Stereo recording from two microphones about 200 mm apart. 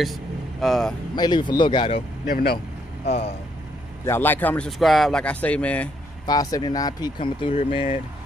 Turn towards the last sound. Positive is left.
turn(degrees=25)  # may be behind; listen again after turning